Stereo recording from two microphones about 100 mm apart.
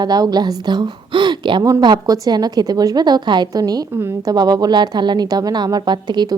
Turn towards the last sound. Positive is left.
turn(degrees=-45)  # may be behind; listen again after turning